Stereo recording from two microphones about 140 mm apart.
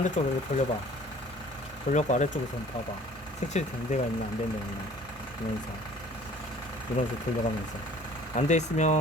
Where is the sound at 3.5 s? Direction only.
55° left (ahead or behind).